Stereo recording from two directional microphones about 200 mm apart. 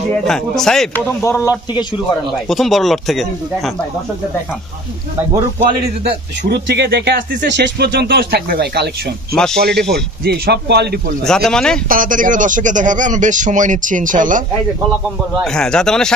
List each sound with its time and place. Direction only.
0.3 s speech: centre (ahead or behind)
1.2 s a man's voice: 15° left (ahead or behind)
2.4 s speech: centre (ahead or behind)
6.0 s speech: 55° right (ahead or behind)
11.2 s speech: centre (ahead or behind)
11.9 s a man's voice: 45° right (ahead or behind)
15.4 s speech: 5° left (ahead or behind)